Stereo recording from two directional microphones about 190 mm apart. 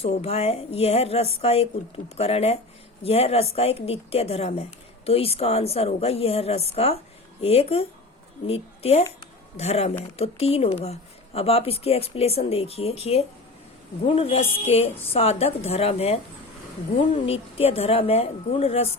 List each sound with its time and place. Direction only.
0.0 s a woman's voice: 35° left (ahead or behind)